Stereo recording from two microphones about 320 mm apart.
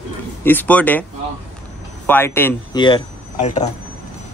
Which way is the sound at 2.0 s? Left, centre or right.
Centre.